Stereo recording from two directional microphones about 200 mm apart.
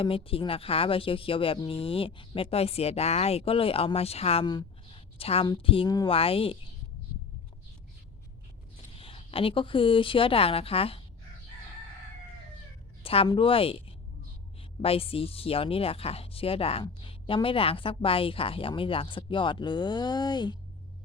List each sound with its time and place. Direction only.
0.0 s speech: 25° left (ahead or behind)
9.0 s speech: 25° left (ahead or behind)
13.0 s speech: 30° left (ahead or behind)